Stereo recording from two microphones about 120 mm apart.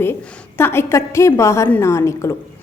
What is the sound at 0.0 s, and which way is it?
A woman's voice, 20° left (ahead or behind).